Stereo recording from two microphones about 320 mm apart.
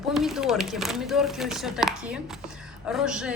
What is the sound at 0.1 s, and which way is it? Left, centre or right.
A woman's voice, centre.